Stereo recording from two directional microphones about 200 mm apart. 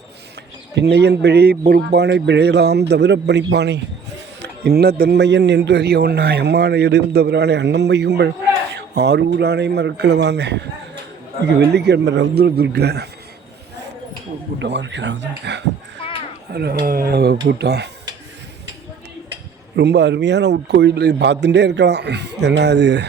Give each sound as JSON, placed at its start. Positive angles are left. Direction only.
{"t": 0.8, "sound": "a man's voice", "side_deg": -55}
{"t": 14.6, "sound": "a man's voice", "side_deg": -60}
{"t": 16.0, "sound": "a sound", "side_deg": 25}
{"t": 16.5, "sound": "speech", "side_deg": -50}
{"t": 19.7, "sound": "a man's voice", "side_deg": -60}